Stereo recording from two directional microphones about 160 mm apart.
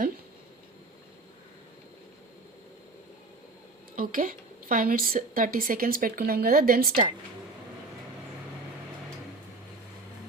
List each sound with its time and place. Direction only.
3.9 s a woman's voice: 60° right (ahead or behind)